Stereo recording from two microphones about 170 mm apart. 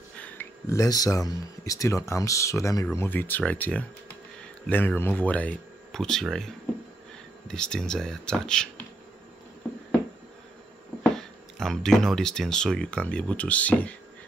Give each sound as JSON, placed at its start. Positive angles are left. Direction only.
{"t": 0.1, "sound": "speech", "side_deg": 10}
{"t": 11.0, "sound": "speech", "side_deg": 5}